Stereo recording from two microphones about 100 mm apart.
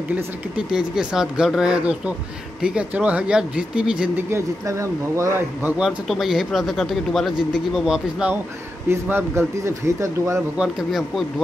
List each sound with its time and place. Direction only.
0.1 s speech: 10° right (ahead or behind)
4.3 s speech: 30° right (ahead or behind)
5.8 s speech: centre (ahead or behind)
8.8 s speech: 25° right (ahead or behind)
10.6 s speech: centre (ahead or behind)